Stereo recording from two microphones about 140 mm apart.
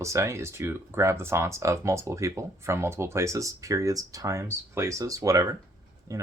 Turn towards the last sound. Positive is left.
turn(degrees=-25)  # may be behind; listen again after turning